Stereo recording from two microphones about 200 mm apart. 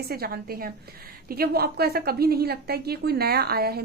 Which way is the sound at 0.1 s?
50° right (ahead or behind).